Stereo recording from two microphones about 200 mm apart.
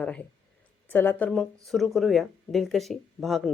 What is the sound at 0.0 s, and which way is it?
Speech, 5° left (ahead or behind).